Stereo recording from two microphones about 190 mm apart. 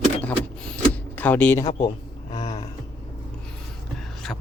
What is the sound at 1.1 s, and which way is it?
Speech, 10° left (ahead or behind).